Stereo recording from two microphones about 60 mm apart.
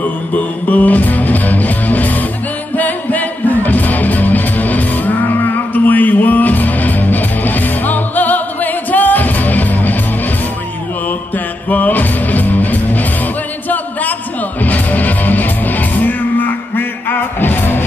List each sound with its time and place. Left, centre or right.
0.0 s music: left
11.1 s music: left
14.6 s music: left